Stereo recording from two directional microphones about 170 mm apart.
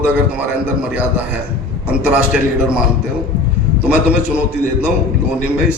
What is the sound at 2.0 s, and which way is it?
Speech, 5° right (ahead or behind).